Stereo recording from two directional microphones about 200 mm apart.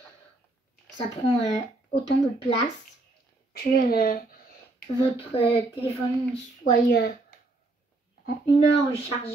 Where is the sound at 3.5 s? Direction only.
50° left (ahead or behind).